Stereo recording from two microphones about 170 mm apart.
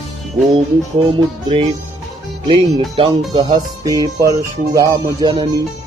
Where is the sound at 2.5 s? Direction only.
35° right (ahead or behind).